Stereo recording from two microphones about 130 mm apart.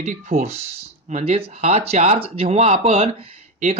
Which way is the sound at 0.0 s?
60° right (ahead or behind).